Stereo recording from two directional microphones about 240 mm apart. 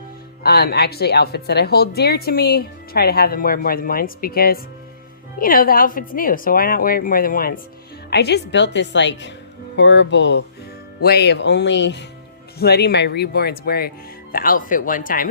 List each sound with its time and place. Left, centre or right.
0.4 s a woman's voice: left